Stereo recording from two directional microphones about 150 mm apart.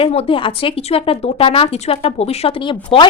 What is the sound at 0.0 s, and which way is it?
A woman's voice, 40° left (ahead or behind).